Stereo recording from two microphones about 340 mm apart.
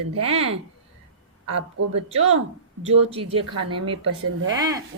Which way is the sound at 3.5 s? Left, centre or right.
Right.